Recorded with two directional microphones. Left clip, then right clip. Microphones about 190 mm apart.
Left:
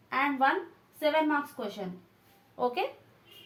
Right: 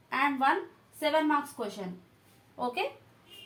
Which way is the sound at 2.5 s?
30° left (ahead or behind).